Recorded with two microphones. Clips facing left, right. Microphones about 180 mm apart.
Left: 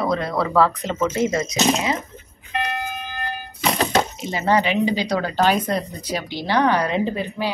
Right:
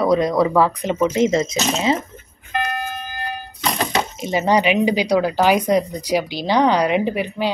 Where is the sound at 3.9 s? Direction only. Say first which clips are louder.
Even; 15° right (ahead or behind).